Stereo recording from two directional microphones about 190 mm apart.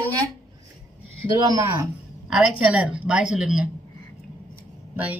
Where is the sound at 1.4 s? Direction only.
15° right (ahead or behind).